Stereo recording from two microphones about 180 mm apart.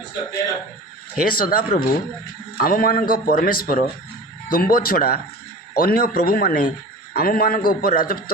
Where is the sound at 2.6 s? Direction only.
50° left (ahead or behind).